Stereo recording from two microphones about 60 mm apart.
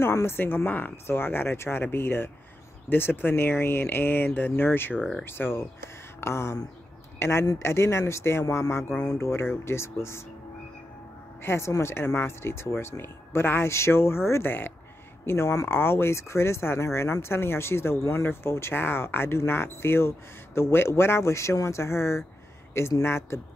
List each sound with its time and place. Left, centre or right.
0.0 s speech: left
11.4 s speech: left